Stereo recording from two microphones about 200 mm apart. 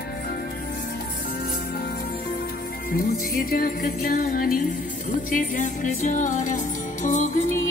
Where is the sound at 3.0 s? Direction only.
45° left (ahead or behind).